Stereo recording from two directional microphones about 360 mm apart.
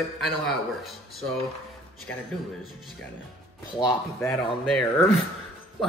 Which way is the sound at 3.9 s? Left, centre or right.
Centre.